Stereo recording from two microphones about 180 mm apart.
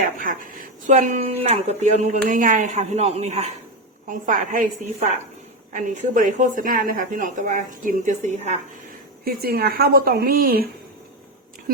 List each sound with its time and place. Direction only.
0.0 s a woman's voice: 50° right (ahead or behind)
0.9 s speech: 40° right (ahead or behind)
4.1 s a woman's voice: 50° right (ahead or behind)
9.2 s a woman's voice: 60° right (ahead or behind)